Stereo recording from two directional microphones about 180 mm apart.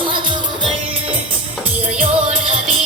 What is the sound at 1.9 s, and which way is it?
Music, 30° right (ahead or behind).